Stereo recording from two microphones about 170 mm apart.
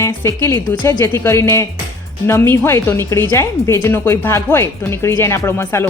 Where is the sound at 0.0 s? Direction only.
15° left (ahead or behind).